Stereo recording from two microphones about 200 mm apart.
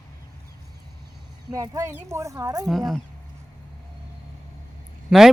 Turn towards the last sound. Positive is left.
turn(degrees=0)  # may be behind; listen again after turning